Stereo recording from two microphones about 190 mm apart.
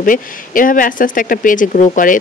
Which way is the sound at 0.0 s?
45° left (ahead or behind).